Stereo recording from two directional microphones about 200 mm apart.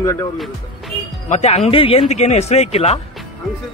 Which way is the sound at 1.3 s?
35° left (ahead or behind).